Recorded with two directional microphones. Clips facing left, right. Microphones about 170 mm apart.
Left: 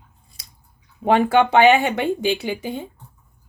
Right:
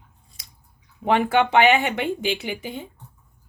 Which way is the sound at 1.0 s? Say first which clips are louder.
Left 3 dB; 35° left (ahead or behind).